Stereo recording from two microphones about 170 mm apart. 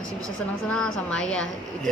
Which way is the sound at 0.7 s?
5° left (ahead or behind).